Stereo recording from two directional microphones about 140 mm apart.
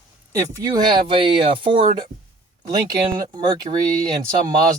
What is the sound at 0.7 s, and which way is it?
Speech, 30° right (ahead or behind).